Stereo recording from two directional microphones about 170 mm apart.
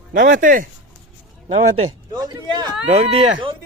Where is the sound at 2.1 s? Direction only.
25° right (ahead or behind).